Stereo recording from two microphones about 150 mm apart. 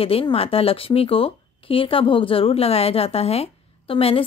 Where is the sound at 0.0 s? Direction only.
40° left (ahead or behind).